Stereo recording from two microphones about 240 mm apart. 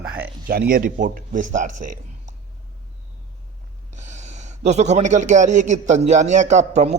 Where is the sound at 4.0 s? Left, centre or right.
Right.